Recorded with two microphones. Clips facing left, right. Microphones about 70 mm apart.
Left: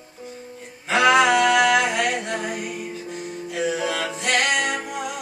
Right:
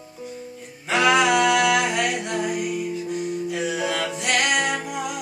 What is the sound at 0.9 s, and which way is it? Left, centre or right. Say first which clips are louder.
Music: left 2 dB; left.